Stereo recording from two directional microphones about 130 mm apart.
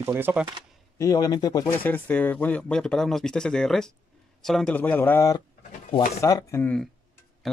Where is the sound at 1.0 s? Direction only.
25° left (ahead or behind).